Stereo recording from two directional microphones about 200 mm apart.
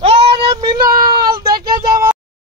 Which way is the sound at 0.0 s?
30° right (ahead or behind).